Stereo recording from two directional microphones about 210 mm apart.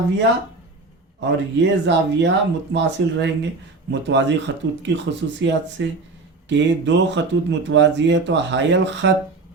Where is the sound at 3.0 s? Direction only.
55° right (ahead or behind).